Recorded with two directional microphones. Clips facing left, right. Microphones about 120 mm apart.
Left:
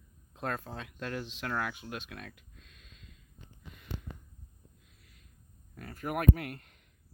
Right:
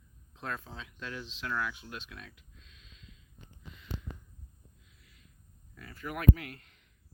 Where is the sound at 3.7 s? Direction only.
50° left (ahead or behind).